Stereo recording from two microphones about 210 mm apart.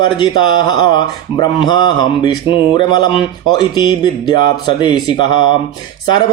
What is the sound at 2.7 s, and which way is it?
Speech, 20° left (ahead or behind).